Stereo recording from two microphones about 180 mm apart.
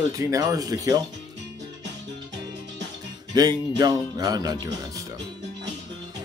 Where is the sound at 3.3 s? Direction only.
20° right (ahead or behind).